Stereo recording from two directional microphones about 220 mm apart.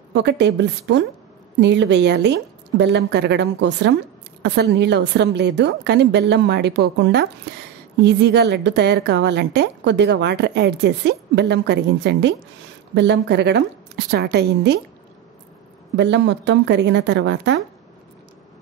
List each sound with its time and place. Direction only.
0.1 s a woman's voice: 50° right (ahead or behind)
16.0 s a woman's voice: 55° right (ahead or behind)